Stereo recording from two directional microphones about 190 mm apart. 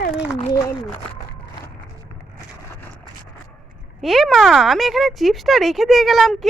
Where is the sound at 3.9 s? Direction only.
Centre (ahead or behind).